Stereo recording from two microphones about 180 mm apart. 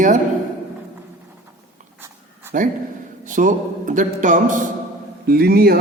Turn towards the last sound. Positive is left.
turn(degrees=-60)  # may be behind; listen again after turning